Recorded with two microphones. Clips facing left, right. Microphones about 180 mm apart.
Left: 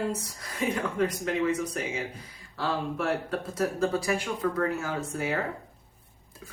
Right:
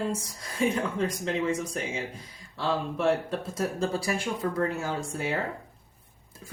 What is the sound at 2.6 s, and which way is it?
Speech, 25° right (ahead or behind).